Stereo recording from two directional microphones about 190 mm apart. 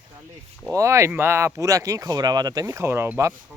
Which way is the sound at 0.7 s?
15° right (ahead or behind).